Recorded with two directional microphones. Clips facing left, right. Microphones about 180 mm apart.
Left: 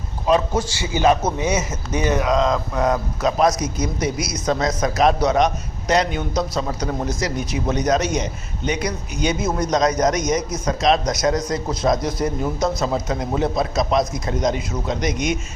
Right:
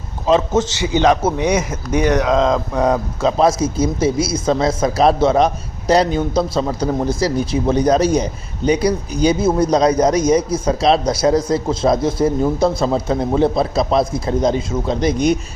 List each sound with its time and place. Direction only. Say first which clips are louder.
0.3 s a man's voice: right 4 dB; 25° right (ahead or behind)
2.2 s a man's voice: right 3 dB; 25° right (ahead or behind)